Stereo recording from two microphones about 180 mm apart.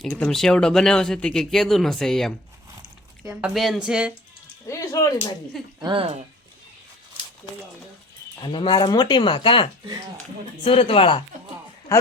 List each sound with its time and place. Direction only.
0.1 s speech: 5° left (ahead or behind)
4.7 s a sound: 20° left (ahead or behind)
5.8 s speech: 30° right (ahead or behind)
8.5 s speech: 25° left (ahead or behind)